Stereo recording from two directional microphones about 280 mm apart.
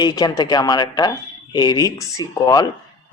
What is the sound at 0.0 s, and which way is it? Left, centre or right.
Speech, centre.